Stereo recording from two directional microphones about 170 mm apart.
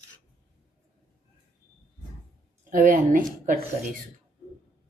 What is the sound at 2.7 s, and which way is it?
Speech, 55° right (ahead or behind).